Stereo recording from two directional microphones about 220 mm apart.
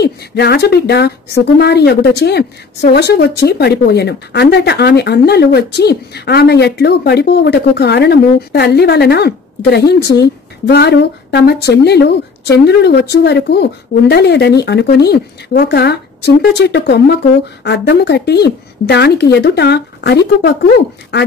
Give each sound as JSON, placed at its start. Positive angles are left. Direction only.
{"t": 0.0, "sound": "a woman's voice", "side_deg": 50}